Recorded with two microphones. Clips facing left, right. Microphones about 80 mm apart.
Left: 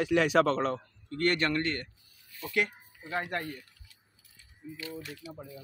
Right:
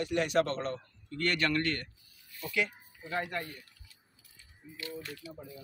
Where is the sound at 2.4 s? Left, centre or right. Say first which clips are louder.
Left 2 dB; left.